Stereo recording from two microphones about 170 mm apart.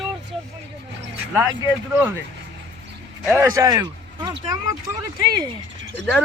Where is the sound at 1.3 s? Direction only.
15° right (ahead or behind).